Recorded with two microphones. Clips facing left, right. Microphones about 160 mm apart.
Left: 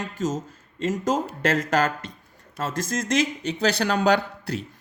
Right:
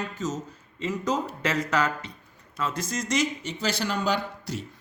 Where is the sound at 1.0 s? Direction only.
45° left (ahead or behind).